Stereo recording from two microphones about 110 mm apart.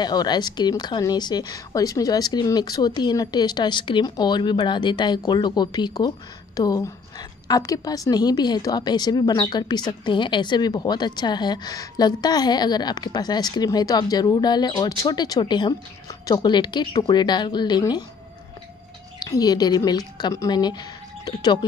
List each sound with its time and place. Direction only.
0.0 s speech: 40° left (ahead or behind)
19.1 s speech: 35° left (ahead or behind)